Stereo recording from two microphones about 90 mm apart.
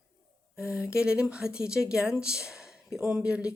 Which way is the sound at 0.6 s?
10° right (ahead or behind).